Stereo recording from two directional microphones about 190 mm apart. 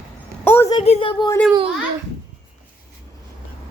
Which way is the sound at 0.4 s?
10° left (ahead or behind).